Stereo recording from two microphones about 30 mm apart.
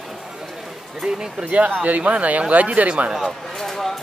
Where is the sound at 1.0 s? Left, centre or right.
Right.